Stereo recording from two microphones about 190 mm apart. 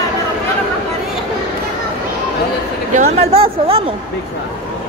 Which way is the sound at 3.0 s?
35° right (ahead or behind).